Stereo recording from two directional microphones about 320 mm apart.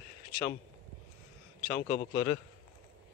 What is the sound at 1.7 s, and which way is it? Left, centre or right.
Speech, centre.